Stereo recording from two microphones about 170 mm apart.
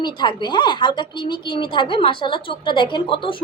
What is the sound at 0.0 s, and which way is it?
A woman's voice, 25° left (ahead or behind).